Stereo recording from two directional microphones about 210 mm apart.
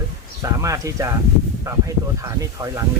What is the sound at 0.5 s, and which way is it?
Speech, 15° right (ahead or behind).